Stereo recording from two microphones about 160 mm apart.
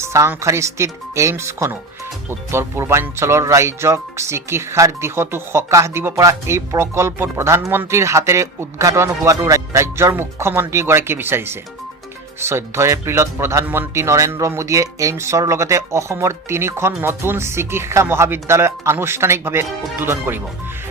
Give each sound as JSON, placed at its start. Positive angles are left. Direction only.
{"t": 0.0, "sound": "speech", "side_deg": -15}